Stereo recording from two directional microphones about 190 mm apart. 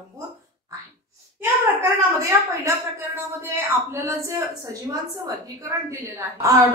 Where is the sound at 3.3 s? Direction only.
10° right (ahead or behind).